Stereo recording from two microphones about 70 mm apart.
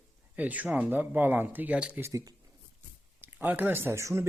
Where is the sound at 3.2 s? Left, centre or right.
Right.